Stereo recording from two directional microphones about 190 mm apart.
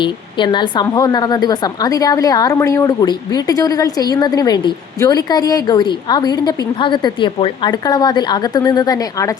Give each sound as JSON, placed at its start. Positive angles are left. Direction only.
{"t": 0.0, "sound": "a woman's voice", "side_deg": 25}